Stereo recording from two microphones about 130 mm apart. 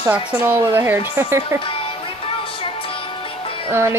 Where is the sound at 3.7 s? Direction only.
20° right (ahead or behind).